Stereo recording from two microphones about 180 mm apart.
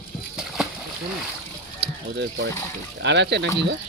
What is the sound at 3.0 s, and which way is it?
Speech, 75° right (ahead or behind).